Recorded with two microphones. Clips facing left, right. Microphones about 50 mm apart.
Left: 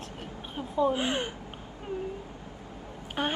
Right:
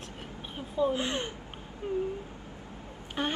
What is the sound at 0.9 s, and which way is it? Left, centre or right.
Speech, left.